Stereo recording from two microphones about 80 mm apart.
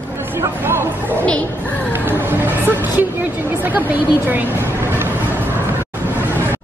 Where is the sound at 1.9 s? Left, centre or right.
Right.